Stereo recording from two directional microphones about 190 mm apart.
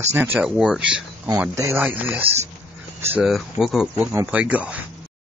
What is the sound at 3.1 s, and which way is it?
Speech, 5° right (ahead or behind).